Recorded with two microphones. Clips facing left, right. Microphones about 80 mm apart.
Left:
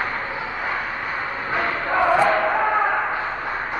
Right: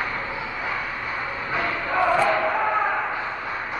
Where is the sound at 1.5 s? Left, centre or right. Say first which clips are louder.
Left 3 dB; left.